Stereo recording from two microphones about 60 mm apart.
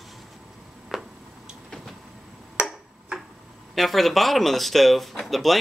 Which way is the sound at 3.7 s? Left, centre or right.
Centre.